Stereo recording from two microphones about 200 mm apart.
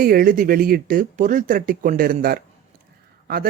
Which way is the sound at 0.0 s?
45° right (ahead or behind).